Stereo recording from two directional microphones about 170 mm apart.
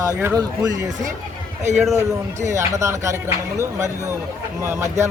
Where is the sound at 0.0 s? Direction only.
15° right (ahead or behind).